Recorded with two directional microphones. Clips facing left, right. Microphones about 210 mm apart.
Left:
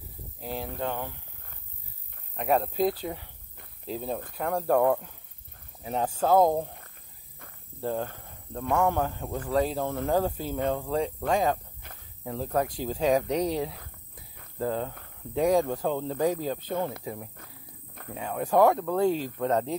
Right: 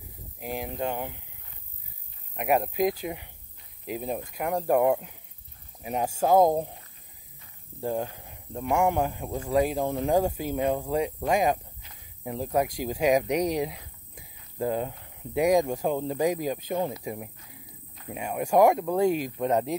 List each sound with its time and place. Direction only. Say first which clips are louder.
0.4 s speech: right 2 dB; 15° right (ahead or behind)
2.3 s speech: right 1 dB; 15° right (ahead or behind)
7.8 s speech: right 1 dB; 15° right (ahead or behind)